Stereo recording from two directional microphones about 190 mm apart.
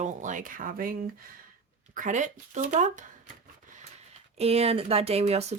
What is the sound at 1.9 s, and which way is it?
Speech, 40° right (ahead or behind).